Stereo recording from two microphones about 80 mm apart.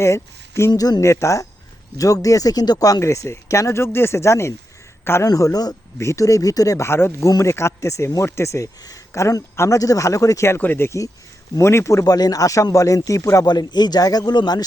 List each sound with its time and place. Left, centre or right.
0.0 s speech: left
0.7 s speech: left
1.0 s speech: left
5.2 s speech: left
6.8 s speech: left
7.3 s speech: left
12.0 s speech: left
13.5 s speech: left